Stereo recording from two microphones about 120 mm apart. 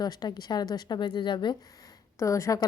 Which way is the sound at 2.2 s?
25° left (ahead or behind).